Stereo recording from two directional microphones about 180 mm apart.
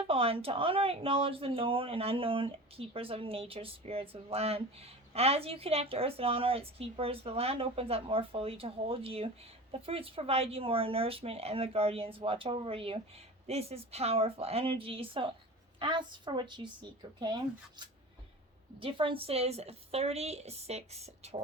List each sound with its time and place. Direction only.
0.1 s a woman's voice: 30° right (ahead or behind)